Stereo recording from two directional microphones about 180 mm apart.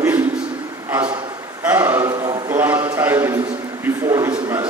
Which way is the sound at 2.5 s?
10° right (ahead or behind).